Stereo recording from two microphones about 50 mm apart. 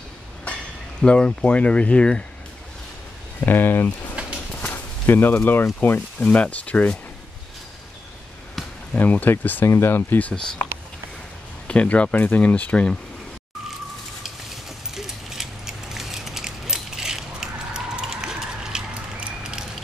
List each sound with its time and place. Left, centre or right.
1.0 s speech: left
3.4 s speech: left
4.1 s a sound: right
4.6 s speech: left
5.9 s speech: left
8.9 s speech: left
10.3 s speech: centre; by 12.8 s left
15.0 s mechanisms: centre